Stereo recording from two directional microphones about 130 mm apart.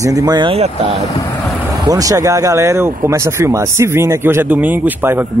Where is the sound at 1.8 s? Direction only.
25° right (ahead or behind).